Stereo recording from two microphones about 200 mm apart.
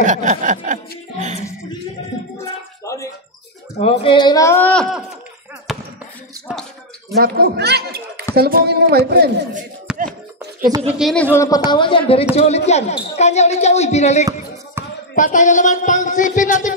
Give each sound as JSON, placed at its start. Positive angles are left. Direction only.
{"t": 0.0, "sound": "chuckle", "side_deg": -40}
{"t": 2.8, "sound": "a sound", "side_deg": 15}
{"t": 3.8, "sound": "speech", "side_deg": 30}
{"t": 5.7, "sound": "basketball bounce", "side_deg": 0}
{"t": 7.2, "sound": "speech", "side_deg": -50}
{"t": 9.9, "sound": "music", "side_deg": -5}
{"t": 10.9, "sound": "speech", "side_deg": 0}
{"t": 14.8, "sound": "a sound", "side_deg": -10}
{"t": 15.1, "sound": "speech", "side_deg": 40}